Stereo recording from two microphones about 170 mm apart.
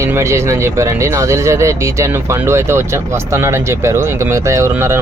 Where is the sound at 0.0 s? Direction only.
15° right (ahead or behind).